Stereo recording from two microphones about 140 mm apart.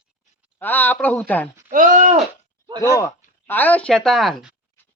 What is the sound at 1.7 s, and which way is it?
Speech, 65° right (ahead or behind).